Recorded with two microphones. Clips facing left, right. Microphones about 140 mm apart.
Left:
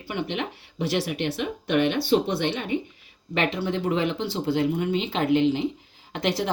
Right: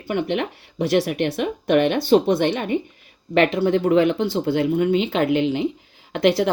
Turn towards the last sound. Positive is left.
turn(degrees=-60)  # may be behind; listen again after turning